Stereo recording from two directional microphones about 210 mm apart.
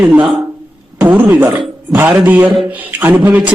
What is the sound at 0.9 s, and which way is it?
A man's voice, 10° right (ahead or behind).